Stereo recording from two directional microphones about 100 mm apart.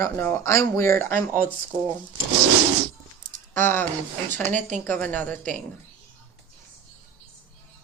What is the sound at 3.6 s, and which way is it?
Speech, 20° left (ahead or behind).